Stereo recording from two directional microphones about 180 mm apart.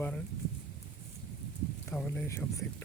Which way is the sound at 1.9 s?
10° left (ahead or behind).